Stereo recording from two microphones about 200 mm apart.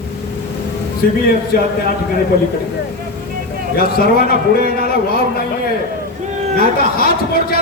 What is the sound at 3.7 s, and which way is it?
Speech, 50° left (ahead or behind).